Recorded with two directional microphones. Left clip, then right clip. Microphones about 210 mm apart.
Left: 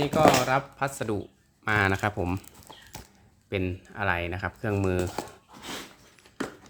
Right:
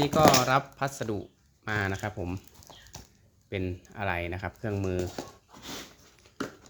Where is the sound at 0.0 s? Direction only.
20° right (ahead or behind).